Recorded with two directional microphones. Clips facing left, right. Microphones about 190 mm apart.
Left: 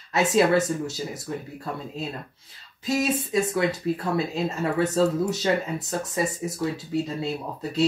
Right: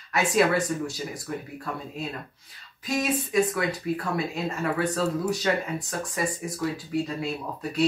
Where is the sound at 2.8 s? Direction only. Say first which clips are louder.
Left 2 dB; 25° left (ahead or behind).